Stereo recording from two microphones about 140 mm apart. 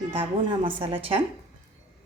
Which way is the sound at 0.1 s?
40° right (ahead or behind).